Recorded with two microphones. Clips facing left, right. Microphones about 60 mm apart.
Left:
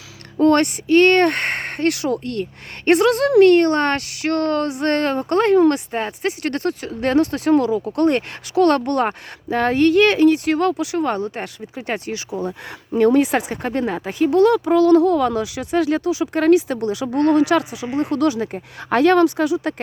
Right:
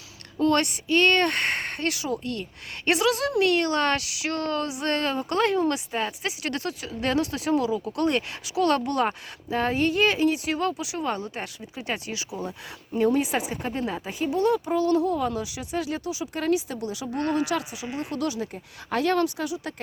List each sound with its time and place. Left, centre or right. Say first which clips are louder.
0.3 s speech: left 7 dB; left
5.9 s speech: left 6 dB; left
12.9 s speech: left 8 dB; left